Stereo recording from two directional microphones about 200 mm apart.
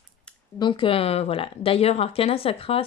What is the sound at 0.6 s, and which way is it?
Speech, 25° left (ahead or behind).